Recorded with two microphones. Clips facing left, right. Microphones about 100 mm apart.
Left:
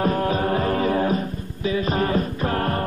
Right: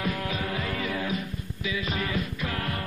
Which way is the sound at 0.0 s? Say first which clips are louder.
Left 9 dB; 40° left (ahead or behind).